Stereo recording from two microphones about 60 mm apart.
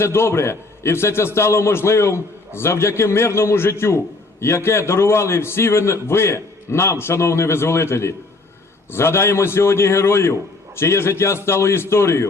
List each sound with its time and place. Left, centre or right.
0.0 s a man's voice: left